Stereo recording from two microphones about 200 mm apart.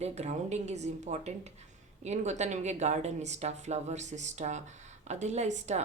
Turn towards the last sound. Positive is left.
turn(degrees=-35)  # may be behind; listen again after turning